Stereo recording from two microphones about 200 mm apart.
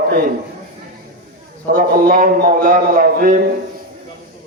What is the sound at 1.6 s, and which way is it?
A man's voice, 45° right (ahead or behind).